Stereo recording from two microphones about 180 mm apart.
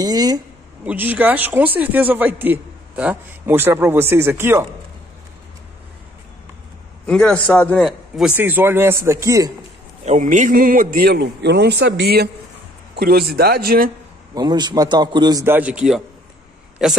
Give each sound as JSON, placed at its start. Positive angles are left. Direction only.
{"t": 0.0, "sound": "a sound", "side_deg": -20}
{"t": 0.8, "sound": "a man's voice", "side_deg": -10}
{"t": 7.1, "sound": "a man's voice", "side_deg": 5}
{"t": 8.4, "sound": "a man's voice", "side_deg": -10}
{"t": 10.0, "sound": "a man's voice", "side_deg": -45}
{"t": 14.3, "sound": "a man's voice", "side_deg": -25}